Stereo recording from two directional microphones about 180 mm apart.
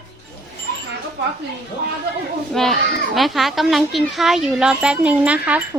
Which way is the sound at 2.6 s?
5° left (ahead or behind).